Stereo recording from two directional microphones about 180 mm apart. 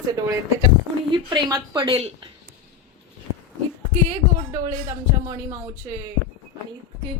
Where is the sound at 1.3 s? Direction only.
20° right (ahead or behind).